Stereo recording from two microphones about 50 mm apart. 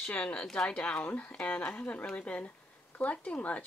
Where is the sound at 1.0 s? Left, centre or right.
Left.